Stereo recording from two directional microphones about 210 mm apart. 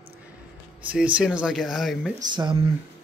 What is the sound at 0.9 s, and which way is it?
Speech, 5° right (ahead or behind).